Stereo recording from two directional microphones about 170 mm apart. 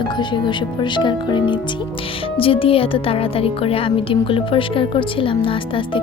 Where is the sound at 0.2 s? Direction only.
25° left (ahead or behind).